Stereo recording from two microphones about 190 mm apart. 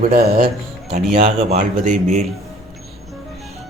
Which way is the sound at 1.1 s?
30° right (ahead or behind).